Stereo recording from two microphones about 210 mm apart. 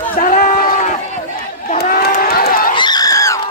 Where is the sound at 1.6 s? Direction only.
45° left (ahead or behind).